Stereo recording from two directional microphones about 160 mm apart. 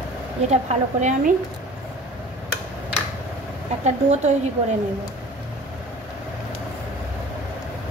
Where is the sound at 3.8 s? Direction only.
45° right (ahead or behind).